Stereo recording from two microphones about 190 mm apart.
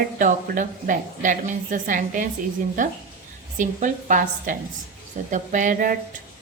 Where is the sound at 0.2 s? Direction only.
45° right (ahead or behind).